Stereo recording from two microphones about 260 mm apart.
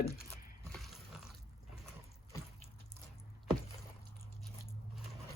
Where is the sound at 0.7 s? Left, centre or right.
Centre.